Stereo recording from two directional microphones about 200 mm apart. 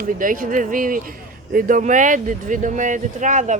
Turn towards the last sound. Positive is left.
turn(degrees=-40)  # may be behind; listen again after turning